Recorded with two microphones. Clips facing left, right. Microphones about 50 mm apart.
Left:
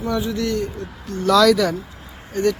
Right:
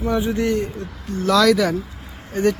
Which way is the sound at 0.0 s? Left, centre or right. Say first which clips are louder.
Right 2 dB; right.